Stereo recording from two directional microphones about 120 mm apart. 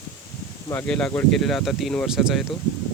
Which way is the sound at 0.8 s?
10° left (ahead or behind).